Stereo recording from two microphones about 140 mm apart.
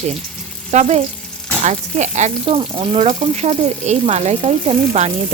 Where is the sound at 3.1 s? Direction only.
55° right (ahead or behind).